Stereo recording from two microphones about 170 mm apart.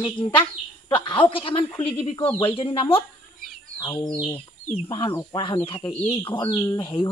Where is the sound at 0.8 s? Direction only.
30° left (ahead or behind).